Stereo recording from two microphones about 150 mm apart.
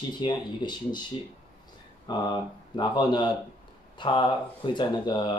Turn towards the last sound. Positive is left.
turn(degrees=30)  # may be behind; listen again after turning